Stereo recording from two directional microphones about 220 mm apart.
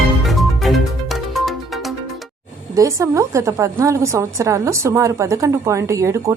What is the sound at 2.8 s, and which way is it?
A woman's voice, 15° right (ahead or behind).